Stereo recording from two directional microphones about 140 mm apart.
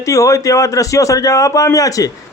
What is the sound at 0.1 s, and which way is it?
A man's voice, 25° left (ahead or behind).